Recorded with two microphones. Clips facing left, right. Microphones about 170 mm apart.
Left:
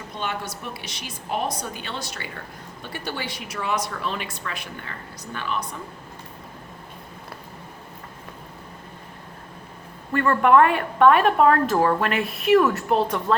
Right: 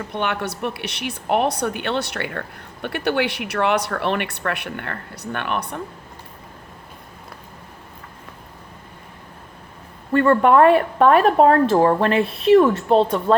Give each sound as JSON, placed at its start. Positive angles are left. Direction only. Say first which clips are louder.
{"t": 0.1, "sound": "speech", "louder": "right 4 dB", "side_deg": -65}
{"t": 10.1, "sound": "speech", "louder": "right 3 dB", "side_deg": -30}